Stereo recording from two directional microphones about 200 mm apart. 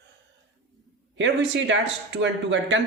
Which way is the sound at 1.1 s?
65° right (ahead or behind).